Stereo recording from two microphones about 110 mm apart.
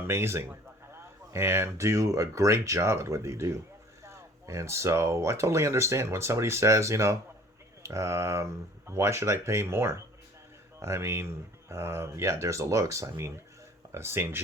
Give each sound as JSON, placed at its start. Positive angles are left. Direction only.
{"t": 0.1, "sound": "speech", "side_deg": -20}